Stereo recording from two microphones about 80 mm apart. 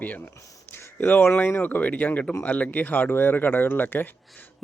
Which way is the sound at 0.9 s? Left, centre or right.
Left.